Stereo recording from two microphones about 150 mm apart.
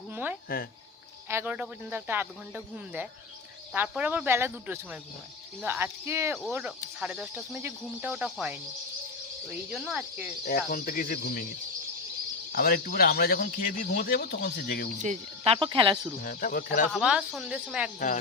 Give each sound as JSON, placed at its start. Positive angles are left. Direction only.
{"t": 0.1, "sound": "cricket", "side_deg": -10}
{"t": 0.4, "sound": "speech", "side_deg": 75}
{"t": 1.3, "sound": "speech", "side_deg": -15}
{"t": 3.7, "sound": "speech", "side_deg": -10}
{"t": 10.7, "sound": "speech", "side_deg": 80}
{"t": 12.5, "sound": "speech", "side_deg": 75}
{"t": 15.0, "sound": "speech", "side_deg": -50}
{"t": 15.5, "sound": "speech", "side_deg": -30}
{"t": 16.2, "sound": "speech", "side_deg": 70}
{"t": 16.9, "sound": "speech", "side_deg": -5}